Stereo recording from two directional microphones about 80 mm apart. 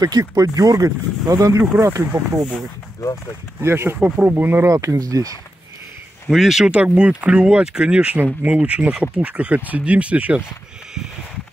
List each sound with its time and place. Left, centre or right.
0.0 s speech: right
2.1 s speech: right
3.6 s speech: right
4.0 s speech: right
4.6 s speech: right
6.2 s speech: centre
6.7 s speech: centre